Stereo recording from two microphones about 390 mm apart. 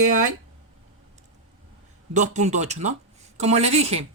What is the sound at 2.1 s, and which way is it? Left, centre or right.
Speech, centre.